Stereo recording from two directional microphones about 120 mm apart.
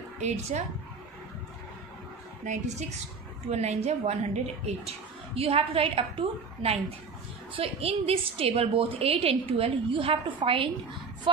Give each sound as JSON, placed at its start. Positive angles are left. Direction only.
{"t": 0.2, "sound": "speech", "side_deg": -65}
{"t": 3.4, "sound": "a woman's voice", "side_deg": -65}